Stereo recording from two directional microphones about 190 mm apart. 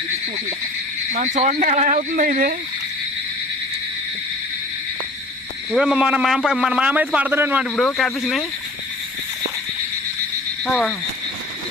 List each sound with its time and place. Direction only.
1.1 s speech: 35° right (ahead or behind)
5.7 s a man's voice: 5° right (ahead or behind)
7.8 s a man's voice: 5° left (ahead or behind)
10.7 s a man's voice: centre (ahead or behind)